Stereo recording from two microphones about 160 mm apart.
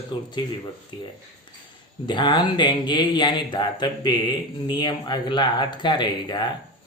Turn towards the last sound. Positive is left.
turn(degrees=30)  # may be behind; listen again after turning